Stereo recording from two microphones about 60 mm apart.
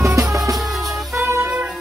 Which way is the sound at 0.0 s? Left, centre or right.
Right.